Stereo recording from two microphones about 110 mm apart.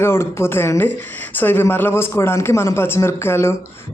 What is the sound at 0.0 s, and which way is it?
Speech, 25° left (ahead or behind).